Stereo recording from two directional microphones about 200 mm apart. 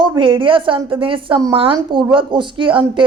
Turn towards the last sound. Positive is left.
turn(degrees=-25)  # may be behind; listen again after turning